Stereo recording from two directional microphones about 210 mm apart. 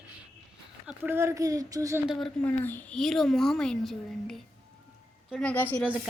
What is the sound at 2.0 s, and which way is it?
Speech, centre (ahead or behind).